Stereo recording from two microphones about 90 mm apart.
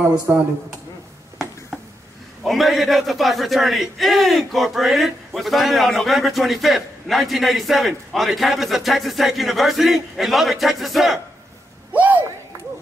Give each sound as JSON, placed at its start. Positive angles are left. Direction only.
{"t": 0.3, "sound": "a man's voice", "side_deg": -15}
{"t": 2.4, "sound": "speech", "side_deg": 0}
{"t": 11.9, "sound": "a sound", "side_deg": -20}